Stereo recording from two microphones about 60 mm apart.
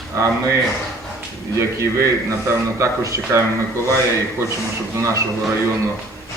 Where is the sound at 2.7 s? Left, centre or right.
Right.